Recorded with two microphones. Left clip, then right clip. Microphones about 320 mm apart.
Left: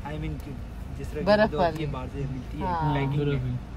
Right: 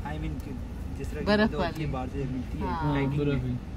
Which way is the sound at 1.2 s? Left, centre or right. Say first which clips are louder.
Left 5 dB; left.